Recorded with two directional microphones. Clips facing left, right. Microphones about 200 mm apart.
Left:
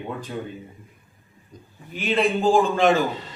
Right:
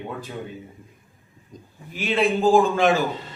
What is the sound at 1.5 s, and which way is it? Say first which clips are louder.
Speech: right 2 dB; 20° right (ahead or behind).